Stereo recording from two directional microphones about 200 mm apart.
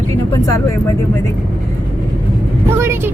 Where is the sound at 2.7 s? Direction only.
15° right (ahead or behind).